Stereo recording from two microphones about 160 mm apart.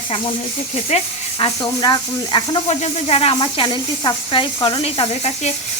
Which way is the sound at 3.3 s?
30° left (ahead or behind).